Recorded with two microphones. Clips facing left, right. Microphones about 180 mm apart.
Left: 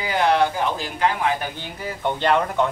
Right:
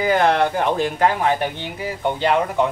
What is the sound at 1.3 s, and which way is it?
Speech, 25° right (ahead or behind).